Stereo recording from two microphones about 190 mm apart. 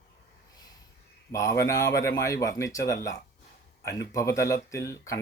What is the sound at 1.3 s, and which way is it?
Speech, 15° left (ahead or behind).